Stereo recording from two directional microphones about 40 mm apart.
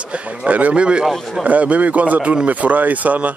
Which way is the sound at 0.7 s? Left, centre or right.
Right.